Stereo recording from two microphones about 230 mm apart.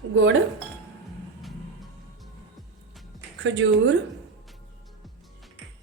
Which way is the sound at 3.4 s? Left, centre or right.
Right.